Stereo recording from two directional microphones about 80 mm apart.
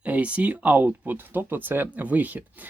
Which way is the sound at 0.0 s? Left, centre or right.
Centre.